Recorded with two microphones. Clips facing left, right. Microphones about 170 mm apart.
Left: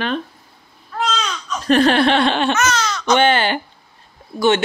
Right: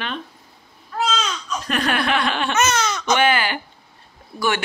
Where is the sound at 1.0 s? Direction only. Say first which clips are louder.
Left 1 dB; 5° right (ahead or behind).